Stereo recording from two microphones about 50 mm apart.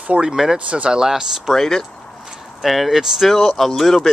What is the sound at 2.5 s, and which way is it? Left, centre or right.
Speech, centre.